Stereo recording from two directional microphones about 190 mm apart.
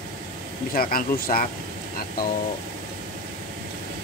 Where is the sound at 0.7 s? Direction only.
50° left (ahead or behind).